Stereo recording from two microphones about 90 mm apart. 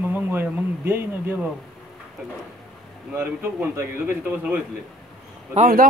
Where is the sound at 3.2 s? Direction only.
25° right (ahead or behind).